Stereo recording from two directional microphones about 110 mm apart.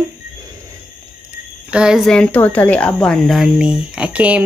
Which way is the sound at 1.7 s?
5° right (ahead or behind).